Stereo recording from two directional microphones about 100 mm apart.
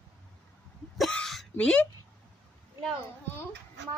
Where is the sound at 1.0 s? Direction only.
5° left (ahead or behind).